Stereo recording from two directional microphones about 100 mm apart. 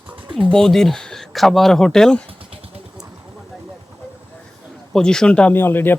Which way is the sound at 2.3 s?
65° right (ahead or behind).